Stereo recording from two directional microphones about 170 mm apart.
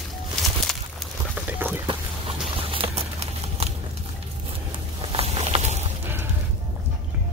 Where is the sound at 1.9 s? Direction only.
30° right (ahead or behind).